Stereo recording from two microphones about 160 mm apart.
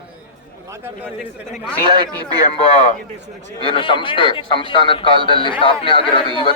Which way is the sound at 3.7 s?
30° left (ahead or behind).